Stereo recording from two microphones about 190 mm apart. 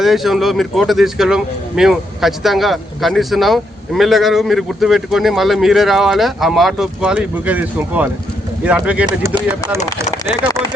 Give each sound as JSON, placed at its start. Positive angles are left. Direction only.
{"t": 0.0, "sound": "a man's voice", "side_deg": 0}
{"t": 9.0, "sound": "speech", "side_deg": -20}
{"t": 9.5, "sound": "speech", "side_deg": -10}